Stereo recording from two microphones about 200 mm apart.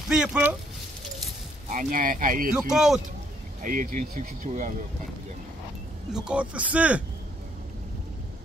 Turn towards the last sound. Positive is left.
turn(degrees=-5)  # may be behind; listen again after turning